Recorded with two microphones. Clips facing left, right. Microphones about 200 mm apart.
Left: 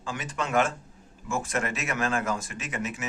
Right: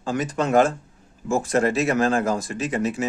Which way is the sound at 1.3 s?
35° right (ahead or behind).